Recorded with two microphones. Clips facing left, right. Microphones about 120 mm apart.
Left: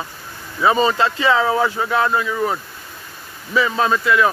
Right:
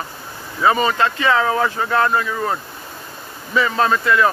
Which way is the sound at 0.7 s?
25° left (ahead or behind).